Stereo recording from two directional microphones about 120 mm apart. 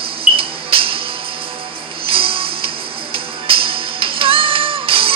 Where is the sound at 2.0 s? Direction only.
50° right (ahead or behind).